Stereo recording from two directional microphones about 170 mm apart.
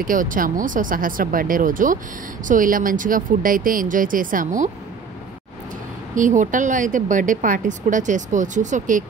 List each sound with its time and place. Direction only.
0.0 s speech: 55° right (ahead or behind)
6.1 s speech: 50° right (ahead or behind)